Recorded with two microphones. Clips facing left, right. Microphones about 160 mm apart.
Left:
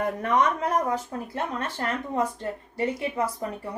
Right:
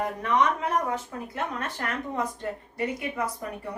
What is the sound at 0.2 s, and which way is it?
Speech, 45° left (ahead or behind).